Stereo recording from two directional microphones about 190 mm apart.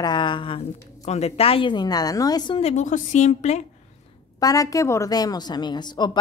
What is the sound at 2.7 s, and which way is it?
Speech, 40° left (ahead or behind).